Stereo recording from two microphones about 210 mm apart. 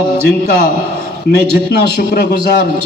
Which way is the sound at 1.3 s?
50° left (ahead or behind).